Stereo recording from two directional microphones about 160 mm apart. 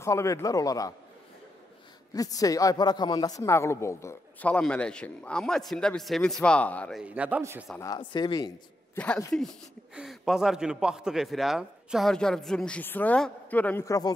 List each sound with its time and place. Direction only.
0.0 s a man's voice: 20° left (ahead or behind)
2.1 s speech: 20° left (ahead or behind)
7.0 s speech: 10° right (ahead or behind)
7.8 s a man's voice: 25° left (ahead or behind)
8.9 s a man's voice: 10° left (ahead or behind)